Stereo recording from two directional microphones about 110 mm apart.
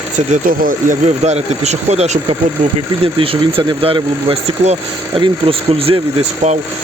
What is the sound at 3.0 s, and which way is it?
Speech, 55° right (ahead or behind).